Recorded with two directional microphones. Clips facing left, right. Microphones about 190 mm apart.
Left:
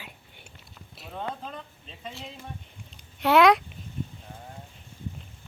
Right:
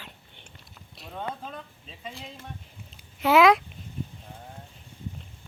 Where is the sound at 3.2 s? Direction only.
Centre (ahead or behind).